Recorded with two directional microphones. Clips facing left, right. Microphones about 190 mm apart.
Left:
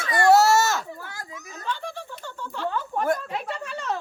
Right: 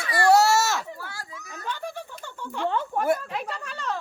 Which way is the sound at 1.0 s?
20° left (ahead or behind).